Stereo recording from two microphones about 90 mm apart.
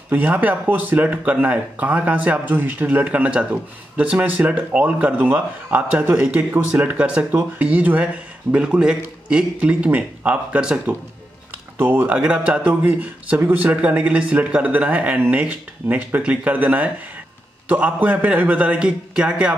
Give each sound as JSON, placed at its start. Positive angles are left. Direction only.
{"t": 0.1, "sound": "speech", "side_deg": -15}